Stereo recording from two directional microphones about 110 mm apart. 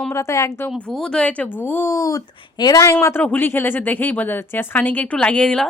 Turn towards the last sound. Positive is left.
turn(degrees=10)  # may be behind; listen again after turning